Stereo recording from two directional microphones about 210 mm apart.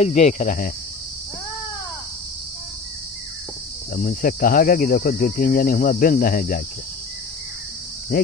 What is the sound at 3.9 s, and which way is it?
Cricket, 40° left (ahead or behind).